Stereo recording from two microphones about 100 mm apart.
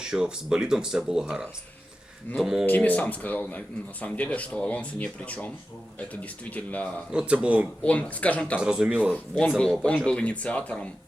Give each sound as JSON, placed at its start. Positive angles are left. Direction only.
{"t": 0.0, "sound": "speech", "side_deg": -5}
{"t": 2.6, "sound": "speech", "side_deg": 15}
{"t": 7.1, "sound": "speech", "side_deg": -10}
{"t": 7.9, "sound": "speech", "side_deg": 15}
{"t": 8.5, "sound": "speech", "side_deg": -10}
{"t": 9.6, "sound": "speech", "side_deg": 5}